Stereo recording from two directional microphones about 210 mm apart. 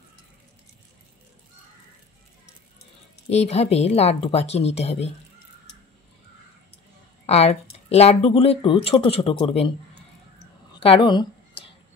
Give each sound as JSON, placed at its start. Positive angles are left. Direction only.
{"t": 3.3, "sound": "speech", "side_deg": 30}
{"t": 7.2, "sound": "a woman's voice", "side_deg": 30}
{"t": 10.7, "sound": "a sound", "side_deg": 25}